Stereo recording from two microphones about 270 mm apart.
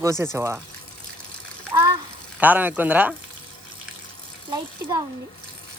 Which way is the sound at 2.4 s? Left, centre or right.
Centre.